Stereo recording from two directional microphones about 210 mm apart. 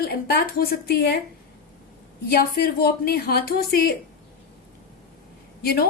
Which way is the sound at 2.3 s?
50° left (ahead or behind).